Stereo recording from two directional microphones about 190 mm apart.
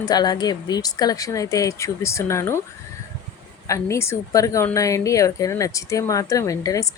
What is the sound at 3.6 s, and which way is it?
Speech, 15° left (ahead or behind).